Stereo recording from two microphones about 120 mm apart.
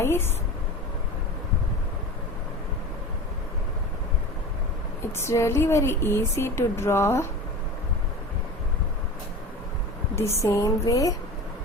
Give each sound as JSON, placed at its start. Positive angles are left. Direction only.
{"t": 0.0, "sound": "a sound", "side_deg": 20}
{"t": 5.1, "sound": "speech", "side_deg": 25}
{"t": 10.2, "sound": "speech", "side_deg": 25}